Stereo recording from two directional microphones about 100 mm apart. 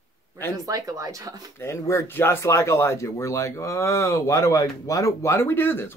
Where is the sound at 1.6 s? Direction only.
30° left (ahead or behind).